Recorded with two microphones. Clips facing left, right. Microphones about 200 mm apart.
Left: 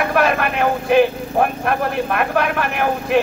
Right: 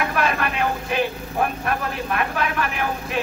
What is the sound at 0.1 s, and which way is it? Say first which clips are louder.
Speech: left 6 dB; 50° left (ahead or behind).